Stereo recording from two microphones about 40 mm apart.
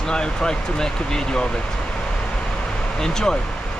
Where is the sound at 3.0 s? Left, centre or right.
Centre.